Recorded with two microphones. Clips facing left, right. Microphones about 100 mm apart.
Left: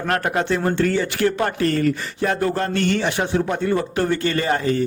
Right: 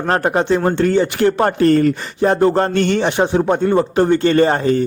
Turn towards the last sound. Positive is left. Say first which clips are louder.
# right 7 dB
turn(degrees=-30)  # may be behind; listen again after turning